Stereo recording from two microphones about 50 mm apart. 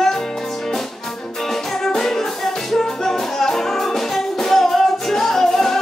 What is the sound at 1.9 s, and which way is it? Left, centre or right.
Music, centre.